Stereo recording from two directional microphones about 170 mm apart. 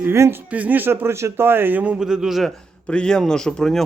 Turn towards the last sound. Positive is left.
turn(degrees=5)  # may be behind; listen again after turning